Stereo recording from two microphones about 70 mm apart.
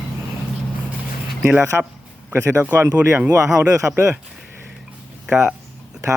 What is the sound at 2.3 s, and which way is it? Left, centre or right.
Speech, right.